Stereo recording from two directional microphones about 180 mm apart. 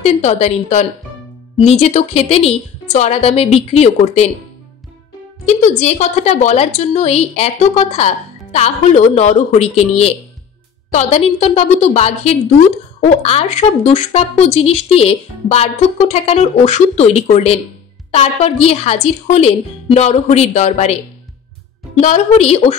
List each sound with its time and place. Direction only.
0.0 s a woman's voice: 35° left (ahead or behind)
5.6 s a woman's voice: 40° left (ahead or behind)